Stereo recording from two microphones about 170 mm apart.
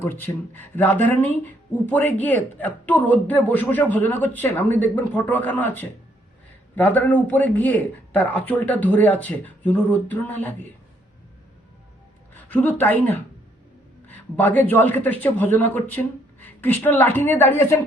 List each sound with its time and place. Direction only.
0.0 s speech: 10° left (ahead or behind)
12.3 s speech: 10° left (ahead or behind)